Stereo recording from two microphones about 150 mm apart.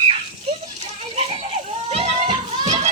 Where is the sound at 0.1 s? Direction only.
40° right (ahead or behind).